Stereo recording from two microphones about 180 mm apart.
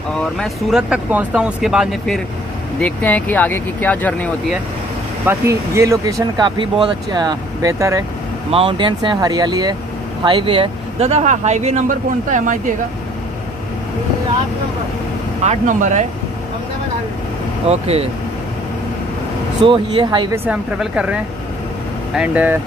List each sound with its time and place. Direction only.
0.2 s speech: centre (ahead or behind)
5.2 s speech: 15° right (ahead or behind)
8.5 s speech: 30° right (ahead or behind)
15.4 s speech: 40° right (ahead or behind)
17.6 s speech: 35° right (ahead or behind)
19.6 s speech: 25° right (ahead or behind)
20.4 s speech: 5° right (ahead or behind)